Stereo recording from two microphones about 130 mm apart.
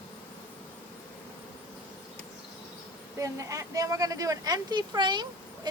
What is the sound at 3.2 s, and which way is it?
Speech, 25° right (ahead or behind).